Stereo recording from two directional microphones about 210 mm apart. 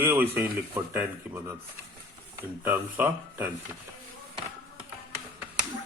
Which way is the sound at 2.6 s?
10° right (ahead or behind).